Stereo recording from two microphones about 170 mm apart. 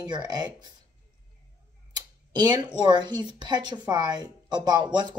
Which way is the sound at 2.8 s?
25° right (ahead or behind).